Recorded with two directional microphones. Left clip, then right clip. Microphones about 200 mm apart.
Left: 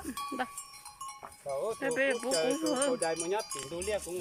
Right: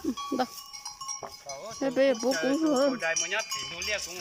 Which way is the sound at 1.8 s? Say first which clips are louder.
Right 8 dB; 20° right (ahead or behind).